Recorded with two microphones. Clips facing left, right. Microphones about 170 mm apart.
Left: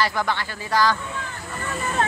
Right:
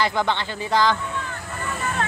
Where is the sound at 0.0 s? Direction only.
20° right (ahead or behind).